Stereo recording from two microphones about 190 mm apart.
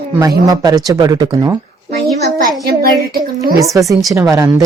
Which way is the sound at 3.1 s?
50° right (ahead or behind).